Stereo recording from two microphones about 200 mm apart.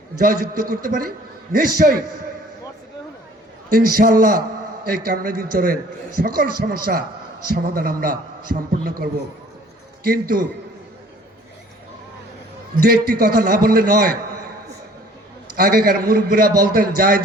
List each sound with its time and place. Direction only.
0.2 s a man's voice: 45° right (ahead or behind)
3.7 s a man's voice: 45° right (ahead or behind)
12.8 s a man's voice: 45° right (ahead or behind)
15.5 s a man's voice: 45° right (ahead or behind)